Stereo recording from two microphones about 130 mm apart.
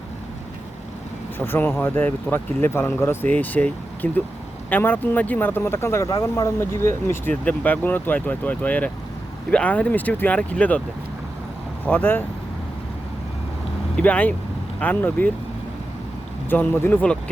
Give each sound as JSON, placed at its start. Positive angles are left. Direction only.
{"t": 1.5, "sound": "speech", "side_deg": 15}
{"t": 11.9, "sound": "speech", "side_deg": 15}
{"t": 13.9, "sound": "speech", "side_deg": 10}
{"t": 16.5, "sound": "speech", "side_deg": 15}